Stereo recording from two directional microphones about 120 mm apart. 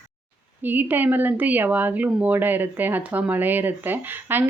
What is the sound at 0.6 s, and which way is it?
Speech, 15° right (ahead or behind).